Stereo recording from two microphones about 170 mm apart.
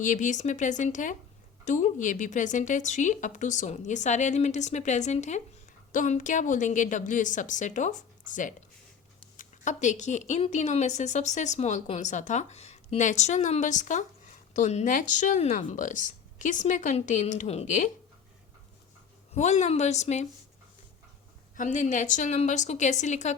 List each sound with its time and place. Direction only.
0.0 s a woman's voice: 50° left (ahead or behind)
19.3 s a woman's voice: 45° left (ahead or behind)
21.5 s a woman's voice: 50° left (ahead or behind)